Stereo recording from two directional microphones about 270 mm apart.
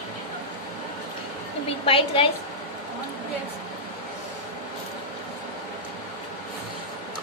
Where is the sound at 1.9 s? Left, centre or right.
Centre.